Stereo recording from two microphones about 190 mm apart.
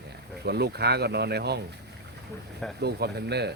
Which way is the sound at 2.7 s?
60° right (ahead or behind).